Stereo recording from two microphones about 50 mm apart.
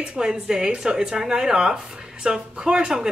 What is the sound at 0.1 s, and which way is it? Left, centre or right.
Speech, centre.